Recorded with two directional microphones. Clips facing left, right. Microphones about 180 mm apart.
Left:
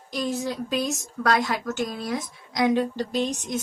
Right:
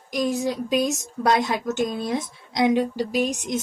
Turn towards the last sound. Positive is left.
turn(degrees=-15)  # may be behind; listen again after turning